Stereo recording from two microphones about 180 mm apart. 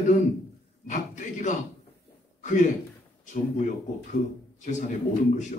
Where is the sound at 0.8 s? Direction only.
45° left (ahead or behind).